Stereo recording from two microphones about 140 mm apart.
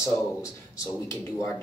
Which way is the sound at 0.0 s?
25° left (ahead or behind).